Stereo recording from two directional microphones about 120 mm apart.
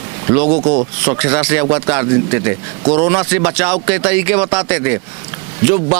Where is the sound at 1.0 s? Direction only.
20° right (ahead or behind).